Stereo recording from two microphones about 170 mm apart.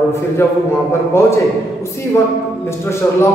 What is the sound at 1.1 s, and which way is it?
Speech, 15° left (ahead or behind).